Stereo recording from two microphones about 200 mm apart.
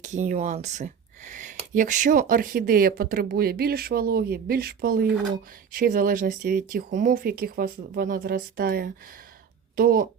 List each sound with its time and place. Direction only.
0.0 s speech: 40° right (ahead or behind)